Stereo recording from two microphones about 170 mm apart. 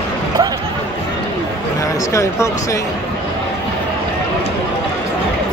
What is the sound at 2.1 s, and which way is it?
Speech, 20° left (ahead or behind).